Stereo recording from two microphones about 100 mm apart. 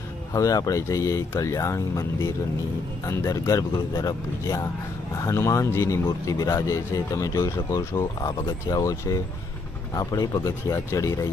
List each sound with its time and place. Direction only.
0.3 s speech: 35° left (ahead or behind)